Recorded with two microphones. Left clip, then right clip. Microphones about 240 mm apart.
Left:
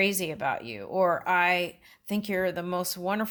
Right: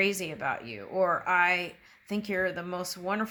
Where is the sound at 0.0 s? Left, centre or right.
Left.